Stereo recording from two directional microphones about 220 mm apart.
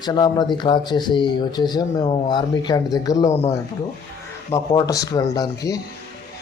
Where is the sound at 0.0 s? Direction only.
20° left (ahead or behind).